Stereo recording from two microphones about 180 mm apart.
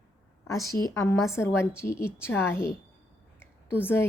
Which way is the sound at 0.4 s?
20° left (ahead or behind).